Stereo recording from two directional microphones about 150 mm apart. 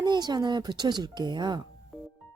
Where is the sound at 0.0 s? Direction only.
30° right (ahead or behind).